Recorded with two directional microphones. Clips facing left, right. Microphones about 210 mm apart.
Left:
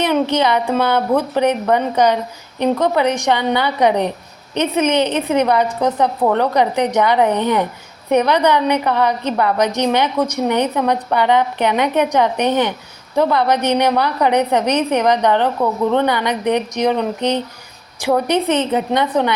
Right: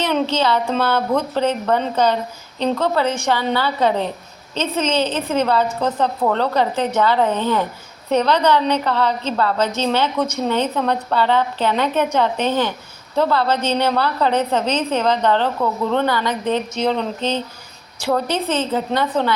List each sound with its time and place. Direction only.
0.0 s a woman's voice: 15° left (ahead or behind)